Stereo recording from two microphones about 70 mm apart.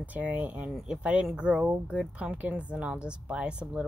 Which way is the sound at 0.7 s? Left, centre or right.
Centre.